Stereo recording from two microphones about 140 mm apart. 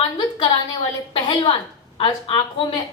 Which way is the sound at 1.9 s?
40° left (ahead or behind).